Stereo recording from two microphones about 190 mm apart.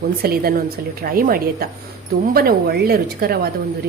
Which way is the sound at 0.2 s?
50° right (ahead or behind).